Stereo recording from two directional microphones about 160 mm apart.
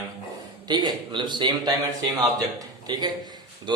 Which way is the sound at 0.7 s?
30° right (ahead or behind).